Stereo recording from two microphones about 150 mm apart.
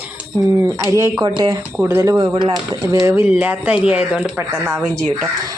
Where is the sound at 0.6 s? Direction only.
20° right (ahead or behind).